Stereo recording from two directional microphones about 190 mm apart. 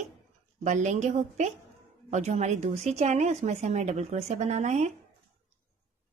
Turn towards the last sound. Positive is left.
turn(degrees=-35)  # may be behind; listen again after turning